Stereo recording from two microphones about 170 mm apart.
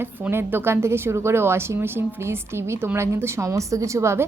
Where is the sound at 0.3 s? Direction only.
15° right (ahead or behind).